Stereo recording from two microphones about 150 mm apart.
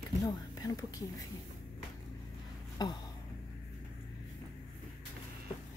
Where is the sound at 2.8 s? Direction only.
30° left (ahead or behind).